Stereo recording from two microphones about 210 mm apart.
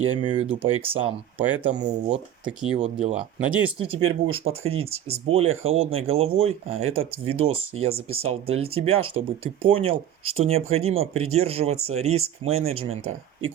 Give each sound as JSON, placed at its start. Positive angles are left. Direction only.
{"t": 0.2, "sound": "speech", "side_deg": -25}
{"t": 1.4, "sound": "speech", "side_deg": -10}
{"t": 1.8, "sound": "speech", "side_deg": -35}
{"t": 3.2, "sound": "speech", "side_deg": -5}
{"t": 4.1, "sound": "speech", "side_deg": -25}